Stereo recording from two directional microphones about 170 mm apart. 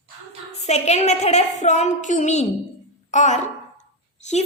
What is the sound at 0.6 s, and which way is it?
A woman's voice, 40° left (ahead or behind).